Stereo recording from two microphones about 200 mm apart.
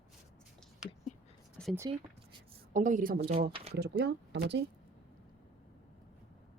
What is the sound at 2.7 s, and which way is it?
Speech, 40° right (ahead or behind).